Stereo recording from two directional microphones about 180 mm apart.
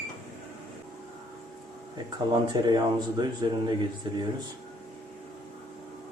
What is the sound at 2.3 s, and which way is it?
Speech, 25° right (ahead or behind).